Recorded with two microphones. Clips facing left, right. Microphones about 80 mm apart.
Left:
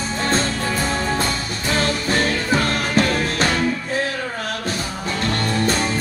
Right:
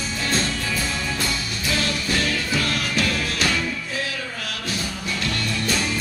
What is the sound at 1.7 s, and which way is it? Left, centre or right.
Music, left.